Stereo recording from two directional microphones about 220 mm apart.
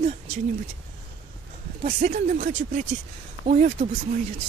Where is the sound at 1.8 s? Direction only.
35° right (ahead or behind).